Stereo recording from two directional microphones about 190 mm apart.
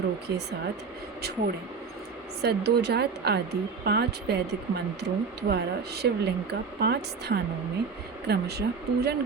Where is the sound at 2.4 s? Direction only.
60° right (ahead or behind).